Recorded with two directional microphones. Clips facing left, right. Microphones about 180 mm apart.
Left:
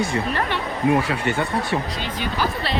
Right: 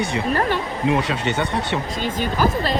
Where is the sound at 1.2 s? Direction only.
20° right (ahead or behind).